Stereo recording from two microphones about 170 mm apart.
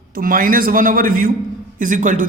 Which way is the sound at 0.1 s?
55° right (ahead or behind).